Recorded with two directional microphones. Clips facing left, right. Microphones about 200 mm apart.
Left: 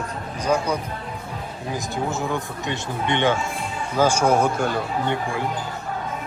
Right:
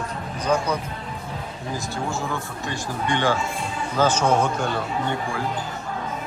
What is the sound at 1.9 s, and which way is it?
Speech, 20° left (ahead or behind).